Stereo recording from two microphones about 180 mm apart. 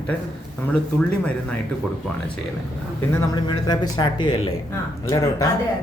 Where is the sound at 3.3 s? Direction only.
25° left (ahead or behind).